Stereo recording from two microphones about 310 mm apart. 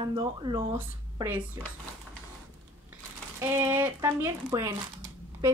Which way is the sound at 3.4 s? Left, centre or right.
Centre.